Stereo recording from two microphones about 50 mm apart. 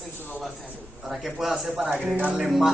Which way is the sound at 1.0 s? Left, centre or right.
Centre.